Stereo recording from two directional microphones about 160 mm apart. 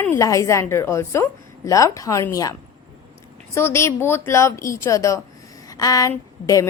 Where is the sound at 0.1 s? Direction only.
20° left (ahead or behind).